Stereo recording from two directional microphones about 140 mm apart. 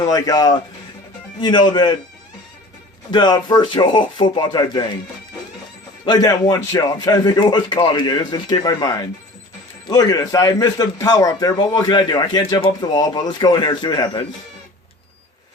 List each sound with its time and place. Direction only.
0.0 s a man's voice: 25° left (ahead or behind)
3.1 s speech: 30° left (ahead or behind)
6.1 s a man's voice: 25° left (ahead or behind)